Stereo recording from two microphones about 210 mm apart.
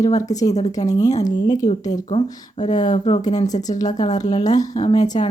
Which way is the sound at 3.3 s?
15° left (ahead or behind).